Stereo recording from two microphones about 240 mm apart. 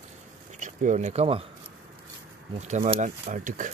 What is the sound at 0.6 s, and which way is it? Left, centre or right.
Speech, right.